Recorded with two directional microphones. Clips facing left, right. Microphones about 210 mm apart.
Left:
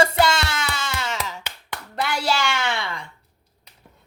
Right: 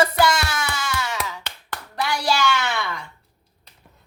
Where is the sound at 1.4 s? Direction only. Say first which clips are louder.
Even; 20° left (ahead or behind).